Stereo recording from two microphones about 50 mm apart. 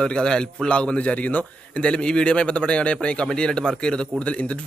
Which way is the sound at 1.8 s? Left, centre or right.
Centre.